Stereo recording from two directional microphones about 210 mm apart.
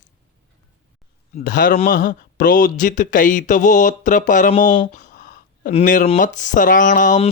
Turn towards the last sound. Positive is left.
turn(degrees=35)  # may be behind; listen again after turning